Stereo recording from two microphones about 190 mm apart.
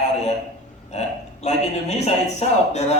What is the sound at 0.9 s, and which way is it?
Burping, 35° left (ahead or behind).